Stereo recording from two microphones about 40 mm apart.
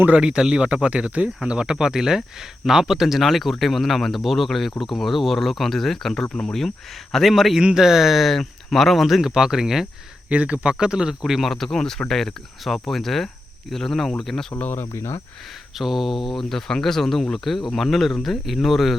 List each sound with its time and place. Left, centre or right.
0.2 s speech: centre
1.5 s speech: centre
7.6 s speech: centre
10.2 s speech: right
11.2 s speech: centre
11.5 s speech: centre
14.7 s speech: left
15.8 s speech: centre